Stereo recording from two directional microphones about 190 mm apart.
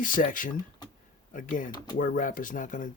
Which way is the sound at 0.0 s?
45° left (ahead or behind).